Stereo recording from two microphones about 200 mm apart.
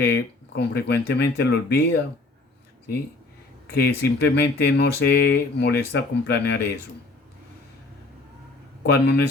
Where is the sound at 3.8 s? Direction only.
55° left (ahead or behind).